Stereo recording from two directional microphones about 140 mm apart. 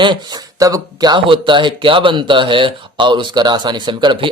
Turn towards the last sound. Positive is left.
turn(degrees=-35)  # may be behind; listen again after turning